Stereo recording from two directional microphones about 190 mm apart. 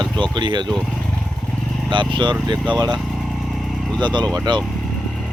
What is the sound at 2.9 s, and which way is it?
Vehicle, centre (ahead or behind).